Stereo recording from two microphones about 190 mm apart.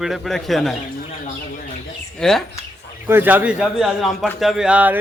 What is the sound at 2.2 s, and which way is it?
Speech, centre (ahead or behind).